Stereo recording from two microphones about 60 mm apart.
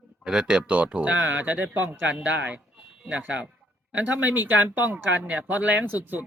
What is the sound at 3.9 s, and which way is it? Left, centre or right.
Speech, right.